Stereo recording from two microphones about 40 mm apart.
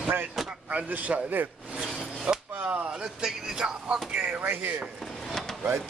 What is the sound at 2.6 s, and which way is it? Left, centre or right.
Speech, right.